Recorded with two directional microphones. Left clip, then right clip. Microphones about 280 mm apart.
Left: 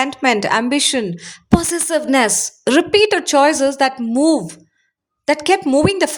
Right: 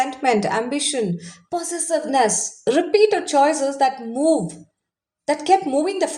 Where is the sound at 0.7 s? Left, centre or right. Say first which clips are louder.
Left 5 dB; left.